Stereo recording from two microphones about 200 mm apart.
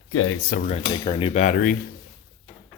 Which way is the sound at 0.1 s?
90° left.